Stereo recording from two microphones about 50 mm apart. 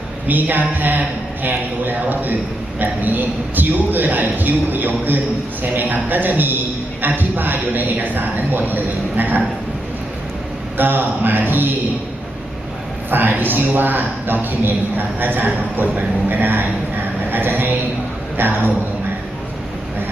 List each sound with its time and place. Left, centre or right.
0.3 s a man's voice: right
10.8 s a man's voice: right
13.1 s a man's voice: right